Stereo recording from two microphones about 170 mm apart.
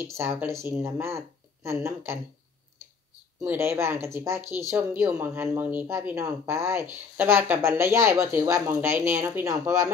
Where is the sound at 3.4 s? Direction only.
10° right (ahead or behind).